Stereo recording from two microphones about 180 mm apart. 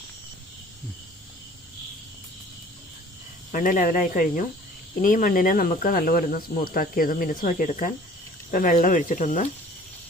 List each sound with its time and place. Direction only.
3.5 s speech: 50° left (ahead or behind)